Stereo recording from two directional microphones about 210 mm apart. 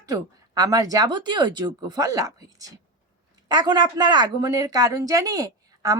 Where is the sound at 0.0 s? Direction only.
15° right (ahead or behind).